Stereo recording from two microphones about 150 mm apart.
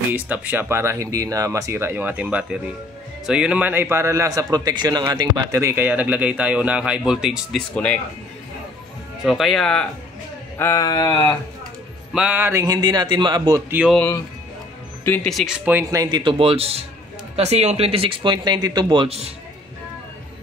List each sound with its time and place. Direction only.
0.1 s a man's voice: 10° right (ahead or behind)
7.7 s speech: 5° left (ahead or behind)
9.2 s speech: centre (ahead or behind)
10.6 s a sound: 20° left (ahead or behind)
12.1 s a man's voice: 5° right (ahead or behind); by 13.6 s 30° right (ahead or behind)
13.7 s speech: 10° right (ahead or behind)
13.9 s speech: 15° left (ahead or behind)
15.2 s speech: centre (ahead or behind)
15.8 s speech: 25° right (ahead or behind); by 19.3 s 40° right (ahead or behind)